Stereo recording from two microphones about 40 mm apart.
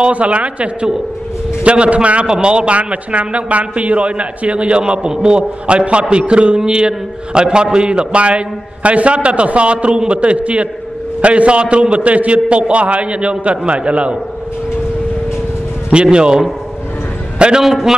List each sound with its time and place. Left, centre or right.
0.0 s a man's voice: right
15.9 s a man's voice: right
17.6 s a man's voice: centre